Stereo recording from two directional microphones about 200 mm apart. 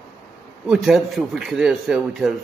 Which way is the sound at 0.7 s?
Centre (ahead or behind).